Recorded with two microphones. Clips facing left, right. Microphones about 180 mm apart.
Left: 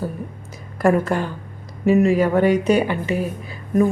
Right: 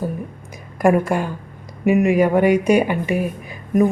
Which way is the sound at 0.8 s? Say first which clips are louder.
Right 1 dB; 15° right (ahead or behind).